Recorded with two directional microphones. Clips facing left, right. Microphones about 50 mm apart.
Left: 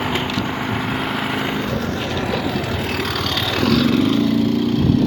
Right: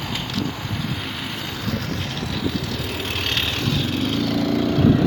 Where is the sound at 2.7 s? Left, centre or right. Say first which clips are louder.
Left 5 dB; left.